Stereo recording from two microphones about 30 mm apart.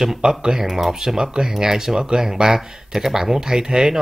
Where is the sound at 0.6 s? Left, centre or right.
Centre.